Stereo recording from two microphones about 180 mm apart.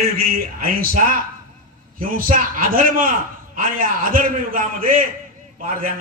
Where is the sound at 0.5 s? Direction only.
50° right (ahead or behind).